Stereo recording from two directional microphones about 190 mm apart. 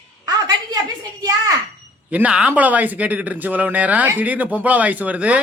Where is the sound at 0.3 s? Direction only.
20° right (ahead or behind).